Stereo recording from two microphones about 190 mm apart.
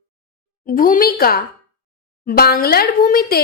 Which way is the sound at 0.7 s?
50° left (ahead or behind).